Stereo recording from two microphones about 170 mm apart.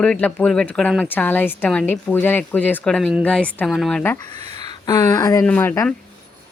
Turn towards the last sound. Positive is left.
turn(degrees=10)  # may be behind; listen again after turning